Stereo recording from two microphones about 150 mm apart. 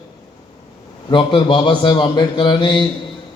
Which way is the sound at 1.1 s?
35° left (ahead or behind).